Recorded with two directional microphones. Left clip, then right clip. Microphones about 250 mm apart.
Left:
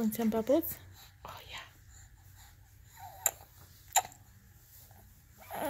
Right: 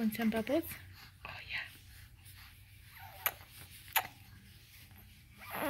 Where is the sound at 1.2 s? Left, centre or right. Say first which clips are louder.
Right 4 dB; centre.